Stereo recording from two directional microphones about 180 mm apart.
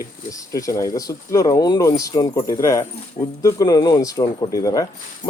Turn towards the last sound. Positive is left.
turn(degrees=20)  # may be behind; listen again after turning